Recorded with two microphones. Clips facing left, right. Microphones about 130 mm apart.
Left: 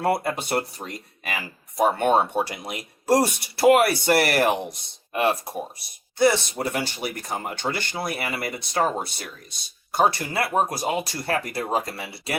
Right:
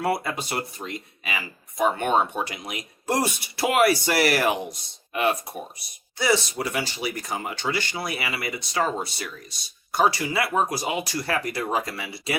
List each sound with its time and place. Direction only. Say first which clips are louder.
0.2 s speech: left 4 dB; 55° left (ahead or behind); by 3.8 s 35° left (ahead or behind)
3.8 s speech: even; 50° left (ahead or behind)
5.1 s speech: left 1 dB; 30° left (ahead or behind)
6.1 s speech: left 3 dB; 55° left (ahead or behind)